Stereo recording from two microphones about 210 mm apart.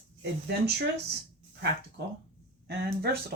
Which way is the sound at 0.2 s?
55° right (ahead or behind).